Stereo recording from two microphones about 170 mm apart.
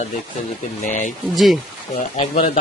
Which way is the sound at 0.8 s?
50° left (ahead or behind).